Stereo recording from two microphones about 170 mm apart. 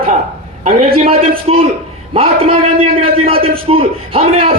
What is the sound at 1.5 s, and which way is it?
A man's voice, 35° right (ahead or behind).